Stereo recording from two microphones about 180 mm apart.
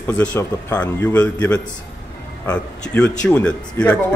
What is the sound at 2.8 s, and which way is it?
Speech, 5° left (ahead or behind).